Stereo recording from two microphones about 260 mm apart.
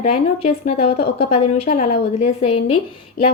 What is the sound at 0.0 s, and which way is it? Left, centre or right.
Speech, left.